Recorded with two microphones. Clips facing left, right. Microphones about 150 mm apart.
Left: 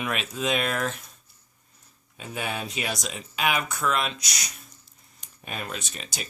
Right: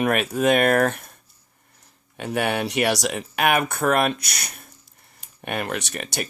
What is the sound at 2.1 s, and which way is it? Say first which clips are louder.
Speech: right 9 dB; 65° right (ahead or behind).